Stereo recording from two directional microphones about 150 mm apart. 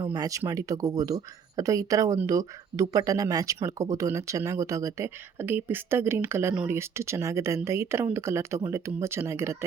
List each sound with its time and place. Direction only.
0.0 s speech: 25° right (ahead or behind)